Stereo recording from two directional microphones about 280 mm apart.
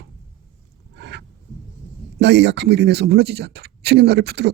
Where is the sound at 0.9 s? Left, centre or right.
Right.